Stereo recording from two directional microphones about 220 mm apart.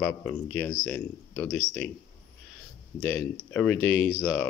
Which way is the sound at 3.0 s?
10° left (ahead or behind).